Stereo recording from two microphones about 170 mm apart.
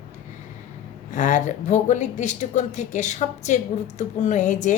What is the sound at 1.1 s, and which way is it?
Speech, 45° left (ahead or behind).